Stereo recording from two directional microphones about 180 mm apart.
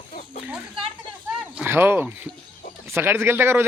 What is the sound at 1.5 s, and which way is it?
Speech, 10° right (ahead or behind).